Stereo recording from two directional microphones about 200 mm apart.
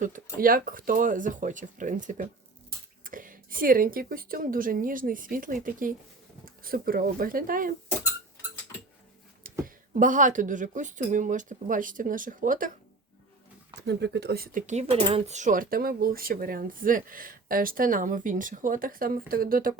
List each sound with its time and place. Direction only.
0.0 s speech: 45° right (ahead or behind)
9.4 s speech: 40° right (ahead or behind)
13.7 s speech: 60° right (ahead or behind)